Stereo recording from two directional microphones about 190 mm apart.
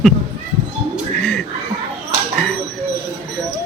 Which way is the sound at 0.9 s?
5° left (ahead or behind).